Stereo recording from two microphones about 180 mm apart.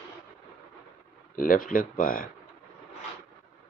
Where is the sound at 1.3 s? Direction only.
50° left (ahead or behind).